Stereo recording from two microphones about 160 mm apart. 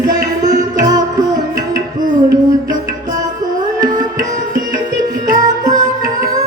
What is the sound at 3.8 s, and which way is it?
Music, 55° right (ahead or behind).